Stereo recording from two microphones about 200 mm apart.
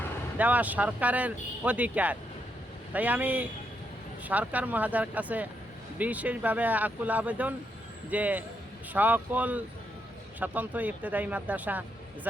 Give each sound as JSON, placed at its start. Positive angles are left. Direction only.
{"t": 0.3, "sound": "speech", "side_deg": -10}